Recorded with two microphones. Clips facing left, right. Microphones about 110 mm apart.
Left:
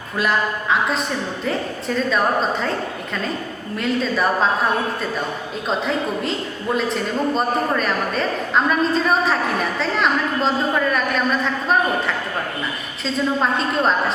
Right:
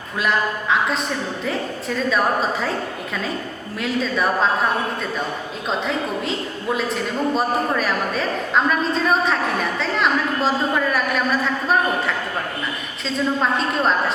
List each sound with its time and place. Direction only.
0.2 s a woman's voice: centre (ahead or behind)
3.8 s a woman's voice: centre (ahead or behind)
5.6 s a woman's voice: centre (ahead or behind)
13.1 s a woman's voice: centre (ahead or behind)